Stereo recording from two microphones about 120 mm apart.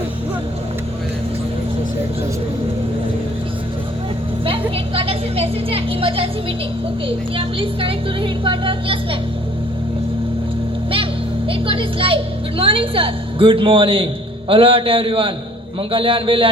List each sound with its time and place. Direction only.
4.4 s a woman's voice: 50° right (ahead or behind)
7.3 s a woman's voice: 50° right (ahead or behind)
11.4 s a woman's voice: 50° right (ahead or behind)